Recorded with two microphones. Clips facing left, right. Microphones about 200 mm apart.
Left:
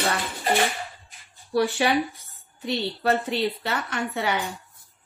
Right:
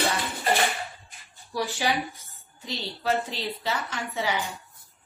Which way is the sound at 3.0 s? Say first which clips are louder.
Left 3 dB; 60° left (ahead or behind).